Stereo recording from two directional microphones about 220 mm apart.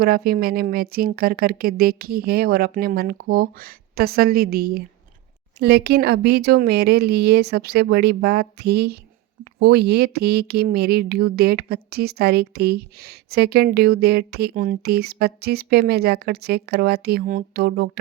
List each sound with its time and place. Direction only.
0.0 s speech: 45° right (ahead or behind)